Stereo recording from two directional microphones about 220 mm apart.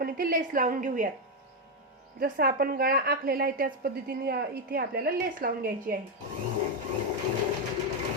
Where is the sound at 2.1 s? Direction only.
40° right (ahead or behind).